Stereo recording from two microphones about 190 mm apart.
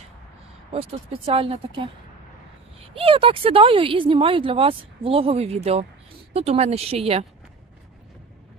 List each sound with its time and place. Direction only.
0.7 s speech: 30° right (ahead or behind)